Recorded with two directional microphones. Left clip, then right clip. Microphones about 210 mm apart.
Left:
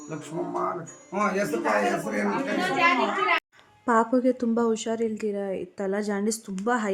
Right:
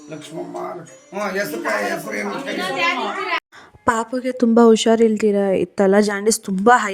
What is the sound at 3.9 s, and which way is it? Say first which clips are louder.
A woman's voice: right 2 dB; 50° right (ahead or behind).